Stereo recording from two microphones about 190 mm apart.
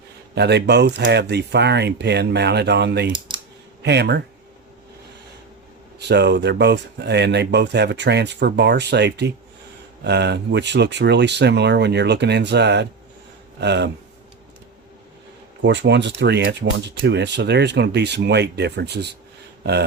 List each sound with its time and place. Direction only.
0.3 s speech: 60° right (ahead or behind)
3.1 s speech: 25° right (ahead or behind)
3.8 s speech: 60° right (ahead or behind)
6.0 s speech: 65° right (ahead or behind)
15.6 s speech: 65° right (ahead or behind)